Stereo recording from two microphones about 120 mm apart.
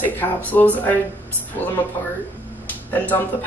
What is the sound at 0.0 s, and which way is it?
Speech, 15° left (ahead or behind).